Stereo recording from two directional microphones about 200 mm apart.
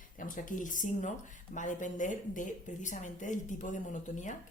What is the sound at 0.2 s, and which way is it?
A woman's voice, 40° left (ahead or behind).